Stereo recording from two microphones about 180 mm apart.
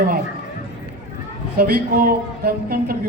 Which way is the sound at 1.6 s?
55° right (ahead or behind).